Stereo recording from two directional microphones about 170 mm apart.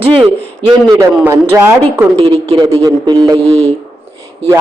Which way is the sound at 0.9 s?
15° right (ahead or behind).